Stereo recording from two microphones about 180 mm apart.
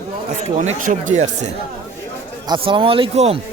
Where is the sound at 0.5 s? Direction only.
45° right (ahead or behind).